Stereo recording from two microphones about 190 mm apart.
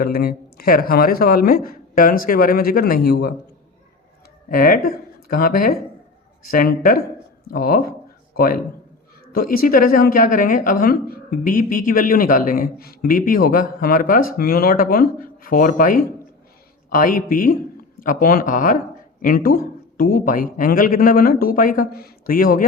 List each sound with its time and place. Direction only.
0.0 s a woman's voice: 55° left (ahead or behind)
4.4 s a woman's voice: 45° left (ahead or behind)